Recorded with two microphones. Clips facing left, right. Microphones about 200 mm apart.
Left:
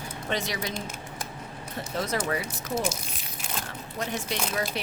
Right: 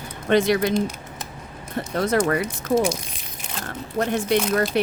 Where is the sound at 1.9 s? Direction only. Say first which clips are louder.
Right 8 dB; 55° right (ahead or behind).